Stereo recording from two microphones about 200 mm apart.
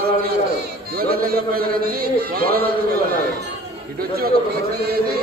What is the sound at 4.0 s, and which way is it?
Music, 50° right (ahead or behind).